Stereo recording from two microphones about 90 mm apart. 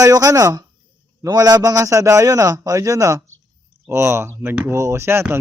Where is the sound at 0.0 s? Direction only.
40° right (ahead or behind).